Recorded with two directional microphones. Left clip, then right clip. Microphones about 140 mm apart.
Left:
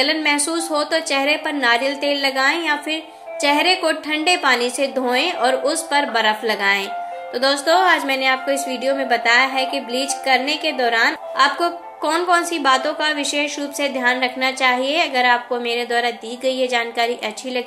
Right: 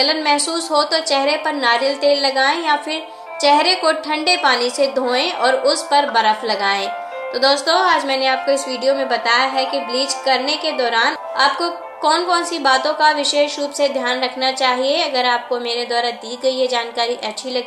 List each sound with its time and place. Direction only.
0.0 s a woman's voice: 40° left (ahead or behind)